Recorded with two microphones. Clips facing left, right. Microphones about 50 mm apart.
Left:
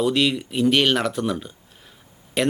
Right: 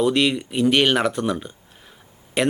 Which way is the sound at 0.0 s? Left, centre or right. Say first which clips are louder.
Right 1 dB; centre.